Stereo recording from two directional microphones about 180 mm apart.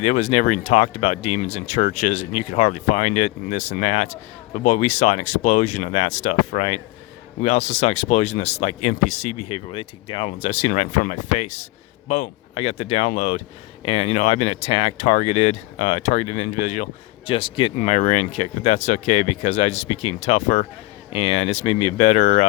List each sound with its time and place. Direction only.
0.0 s speech: 40° left (ahead or behind)